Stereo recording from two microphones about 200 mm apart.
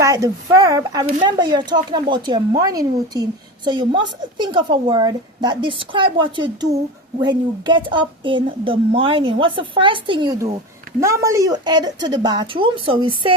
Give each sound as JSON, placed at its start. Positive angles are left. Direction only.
{"t": 0.0, "sound": "a woman's voice", "side_deg": -15}